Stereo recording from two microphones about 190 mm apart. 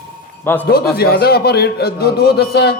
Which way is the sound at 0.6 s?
55° left (ahead or behind).